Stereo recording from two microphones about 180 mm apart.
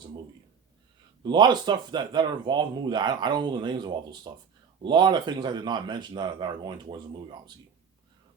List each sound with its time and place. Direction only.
1.2 s speech: 25° right (ahead or behind)